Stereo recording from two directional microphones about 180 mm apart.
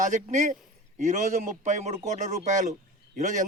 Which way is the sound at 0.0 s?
45° right (ahead or behind).